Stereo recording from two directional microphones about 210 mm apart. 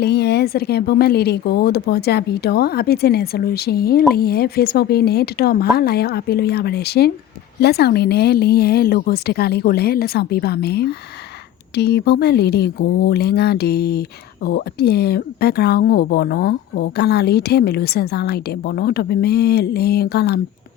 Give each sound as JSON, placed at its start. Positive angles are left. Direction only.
{"t": 0.0, "sound": "speech", "side_deg": 50}
{"t": 12.8, "sound": "speech", "side_deg": 80}
{"t": 13.1, "sound": "speech", "side_deg": 50}